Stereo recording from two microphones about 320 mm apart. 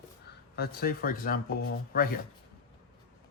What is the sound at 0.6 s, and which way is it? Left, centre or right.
Speech, left.